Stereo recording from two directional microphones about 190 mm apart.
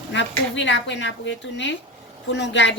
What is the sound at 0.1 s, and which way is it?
Speech, 70° left (ahead or behind).